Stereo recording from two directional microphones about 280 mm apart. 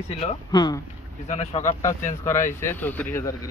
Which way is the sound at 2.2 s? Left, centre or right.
Centre.